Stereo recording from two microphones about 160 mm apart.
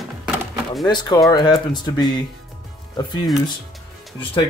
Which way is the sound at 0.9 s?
25° left (ahead or behind).